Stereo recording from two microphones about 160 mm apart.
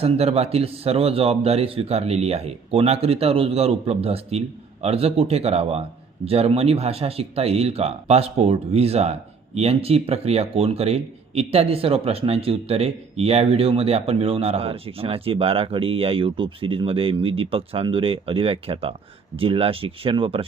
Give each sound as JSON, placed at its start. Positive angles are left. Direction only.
{"t": 0.0, "sound": "speech", "side_deg": -40}